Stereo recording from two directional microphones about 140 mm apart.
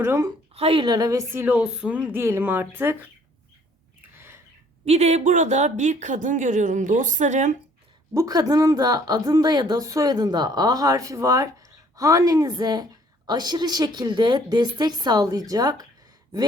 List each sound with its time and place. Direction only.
0.0 s a woman's voice: 15° right (ahead or behind)
0.5 s a woman's voice: 40° right (ahead or behind); by 3.1 s 15° right (ahead or behind)
4.9 s speech: 50° right (ahead or behind)
8.1 s a woman's voice: 25° right (ahead or behind)